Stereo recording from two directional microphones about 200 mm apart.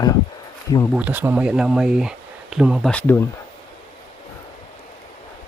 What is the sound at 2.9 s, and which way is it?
Speech, 10° left (ahead or behind).